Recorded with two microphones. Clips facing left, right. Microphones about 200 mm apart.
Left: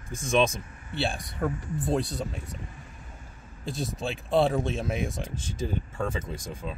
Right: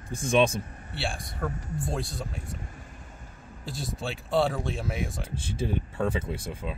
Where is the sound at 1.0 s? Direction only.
20° left (ahead or behind).